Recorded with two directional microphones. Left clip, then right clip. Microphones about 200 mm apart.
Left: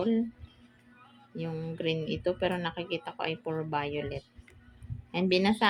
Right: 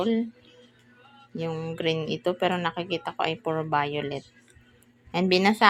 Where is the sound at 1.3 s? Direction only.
10° right (ahead or behind).